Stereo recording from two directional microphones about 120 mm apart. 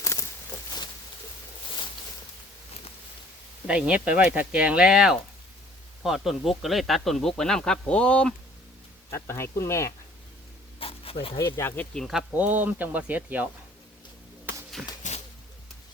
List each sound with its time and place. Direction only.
0.0 s a sound: 25° left (ahead or behind)
3.7 s speech: 10° right (ahead or behind); by 8.3 s 10° left (ahead or behind)
9.0 s speech: 25° left (ahead or behind)
10.8 s insect: 50° left (ahead or behind)
11.3 s speech: 25° left (ahead or behind)
11.9 s speech: centre (ahead or behind)
12.4 s speech: 15° right (ahead or behind)
14.8 s a sound: 5° right (ahead or behind)